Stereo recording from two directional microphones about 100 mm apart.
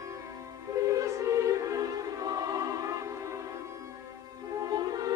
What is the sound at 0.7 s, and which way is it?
Music, 35° right (ahead or behind).